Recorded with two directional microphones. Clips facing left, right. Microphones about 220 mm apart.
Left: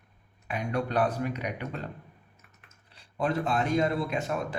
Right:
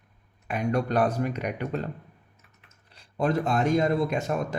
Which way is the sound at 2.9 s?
40° right (ahead or behind).